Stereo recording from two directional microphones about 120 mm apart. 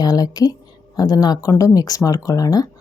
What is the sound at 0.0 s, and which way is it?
Speech, 35° left (ahead or behind).